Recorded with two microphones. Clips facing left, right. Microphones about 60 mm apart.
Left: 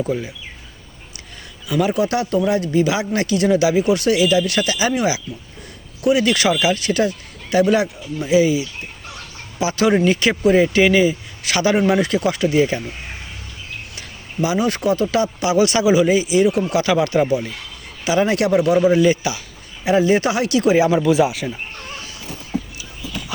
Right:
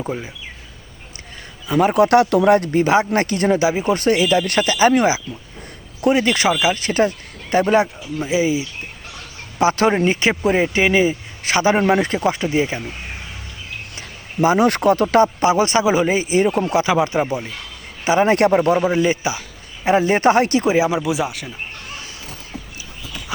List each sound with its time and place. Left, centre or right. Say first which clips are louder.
0.0 s a man's voice: left 4 dB; centre
1.6 s speech: right 3 dB; right
1.9 s speech: right 5 dB; right
3.6 s speech: left 1 dB; right
6.0 s a man's voice: even; right
9.6 s speech: right 2 dB; right
9.9 s a man's voice: left 1 dB; right
14.6 s speech: right 3 dB; right
16.6 s a man's voice: right 1 dB; right
18.0 s speech: right 3 dB; right
18.8 s a man's voice: left 3 dB; right
19.8 s speech: right 1 dB; right
20.7 s speech: left 3 dB; centre